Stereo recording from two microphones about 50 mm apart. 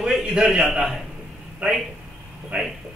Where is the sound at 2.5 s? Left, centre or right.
Right.